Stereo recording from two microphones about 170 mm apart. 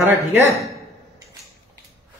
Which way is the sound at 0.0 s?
15° right (ahead or behind).